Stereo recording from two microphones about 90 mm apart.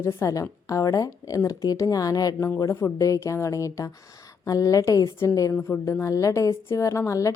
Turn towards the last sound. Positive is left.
turn(degrees=35)  # may be behind; listen again after turning